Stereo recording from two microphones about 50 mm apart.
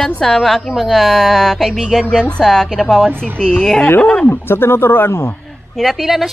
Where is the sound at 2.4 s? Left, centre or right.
Centre.